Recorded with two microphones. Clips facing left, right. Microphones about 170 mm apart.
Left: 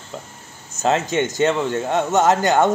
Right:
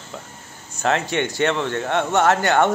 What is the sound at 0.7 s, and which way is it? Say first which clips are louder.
Speech: left 2 dB; 20° left (ahead or behind).